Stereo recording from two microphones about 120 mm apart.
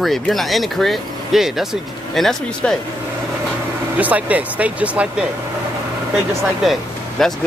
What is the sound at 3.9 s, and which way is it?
Speech, 15° right (ahead or behind).